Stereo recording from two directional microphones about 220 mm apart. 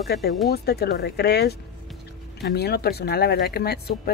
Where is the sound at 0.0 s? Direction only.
45° left (ahead or behind).